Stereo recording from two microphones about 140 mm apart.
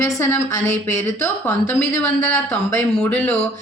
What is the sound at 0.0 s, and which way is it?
A woman's voice, 15° left (ahead or behind).